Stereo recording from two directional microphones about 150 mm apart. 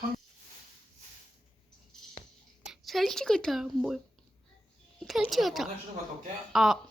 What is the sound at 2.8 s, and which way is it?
Speech, centre (ahead or behind).